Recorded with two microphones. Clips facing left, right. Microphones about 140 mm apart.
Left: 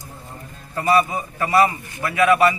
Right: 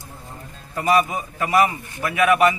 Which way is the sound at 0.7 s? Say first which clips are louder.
Left 1 dB; 15° right (ahead or behind).